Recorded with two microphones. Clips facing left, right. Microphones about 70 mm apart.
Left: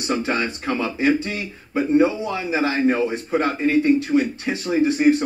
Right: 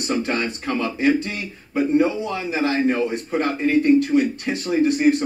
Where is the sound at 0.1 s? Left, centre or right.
Centre.